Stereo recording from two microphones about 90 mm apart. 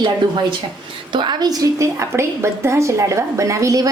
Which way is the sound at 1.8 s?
30° right (ahead or behind).